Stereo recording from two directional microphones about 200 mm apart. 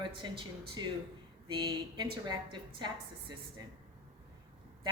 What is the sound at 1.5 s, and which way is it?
A man's voice, 20° right (ahead or behind).